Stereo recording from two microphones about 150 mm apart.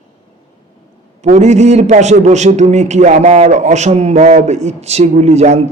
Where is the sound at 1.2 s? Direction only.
50° right (ahead or behind).